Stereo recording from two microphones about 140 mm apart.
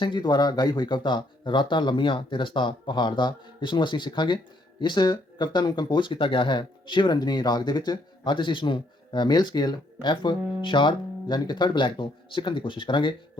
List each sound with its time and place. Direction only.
0.0 s speech: 35° left (ahead or behind)